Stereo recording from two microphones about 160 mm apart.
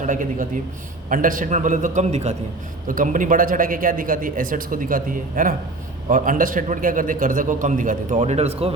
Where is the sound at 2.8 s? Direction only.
55° right (ahead or behind).